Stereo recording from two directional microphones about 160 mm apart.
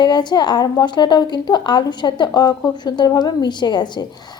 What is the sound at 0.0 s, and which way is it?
A woman's voice, 25° left (ahead or behind).